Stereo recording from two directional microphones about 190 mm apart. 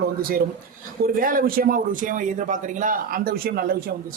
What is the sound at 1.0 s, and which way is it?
A woman's voice, 45° right (ahead or behind).